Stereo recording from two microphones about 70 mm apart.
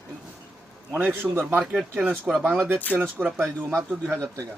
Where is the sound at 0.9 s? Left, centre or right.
Right.